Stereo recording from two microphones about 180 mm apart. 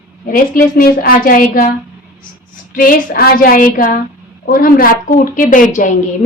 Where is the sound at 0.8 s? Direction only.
55° left (ahead or behind).